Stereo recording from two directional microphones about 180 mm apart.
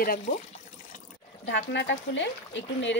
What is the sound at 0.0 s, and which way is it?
Speech, 55° left (ahead or behind).